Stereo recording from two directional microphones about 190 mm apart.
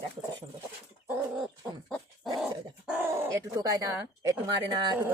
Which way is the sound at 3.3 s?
15° right (ahead or behind).